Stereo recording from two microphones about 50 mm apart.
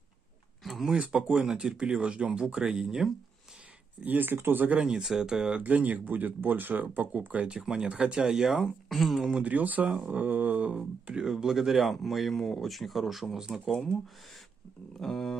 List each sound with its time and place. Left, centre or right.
0.7 s a sound: centre
0.9 s speech: right
4.0 s speech: right
4.6 s speech: centre
5.0 s speech: centre
5.6 s speech: right
7.6 s speech: centre
9.3 s speech: right
11.2 s speech: centre
13.7 s a sound: centre
15.0 s a sound: centre